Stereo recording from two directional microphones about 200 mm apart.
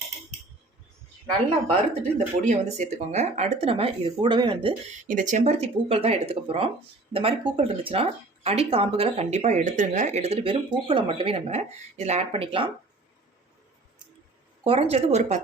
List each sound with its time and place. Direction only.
2.1 s speech: 35° right (ahead or behind)
5.0 s speech: 40° right (ahead or behind)
14.6 s speech: 30° right (ahead or behind)